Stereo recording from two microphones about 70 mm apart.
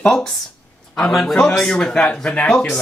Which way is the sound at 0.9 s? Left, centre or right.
Centre.